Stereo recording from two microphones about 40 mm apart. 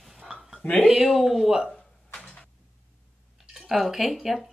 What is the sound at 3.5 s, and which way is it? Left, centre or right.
Speech, centre.